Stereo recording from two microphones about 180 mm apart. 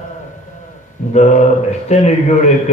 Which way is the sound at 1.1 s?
40° left (ahead or behind).